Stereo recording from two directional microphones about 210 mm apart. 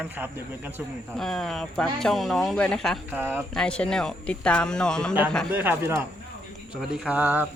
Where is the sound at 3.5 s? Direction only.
5° left (ahead or behind).